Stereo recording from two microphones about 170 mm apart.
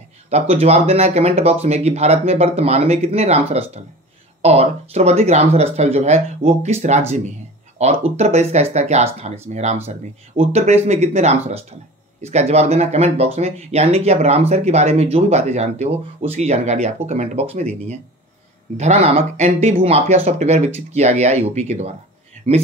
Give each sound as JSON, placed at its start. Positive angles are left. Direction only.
{"t": 0.3, "sound": "speech", "side_deg": -35}